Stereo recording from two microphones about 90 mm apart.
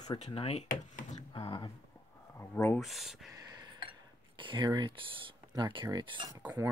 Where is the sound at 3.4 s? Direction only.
45° right (ahead or behind).